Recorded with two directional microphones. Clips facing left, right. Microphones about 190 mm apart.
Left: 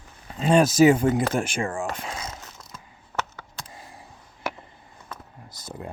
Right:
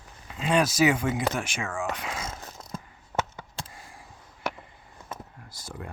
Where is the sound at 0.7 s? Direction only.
50° left (ahead or behind).